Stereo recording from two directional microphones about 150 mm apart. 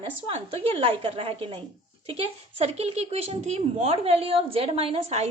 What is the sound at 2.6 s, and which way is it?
Speech, 45° right (ahead or behind).